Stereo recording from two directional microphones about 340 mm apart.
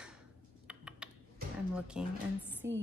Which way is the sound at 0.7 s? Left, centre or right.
Centre.